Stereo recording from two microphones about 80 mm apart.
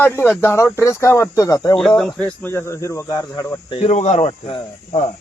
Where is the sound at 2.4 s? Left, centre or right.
Left.